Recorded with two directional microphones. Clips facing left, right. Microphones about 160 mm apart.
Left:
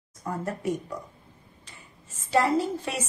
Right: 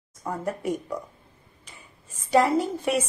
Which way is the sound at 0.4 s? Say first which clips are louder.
Right 1 dB; 15° right (ahead or behind).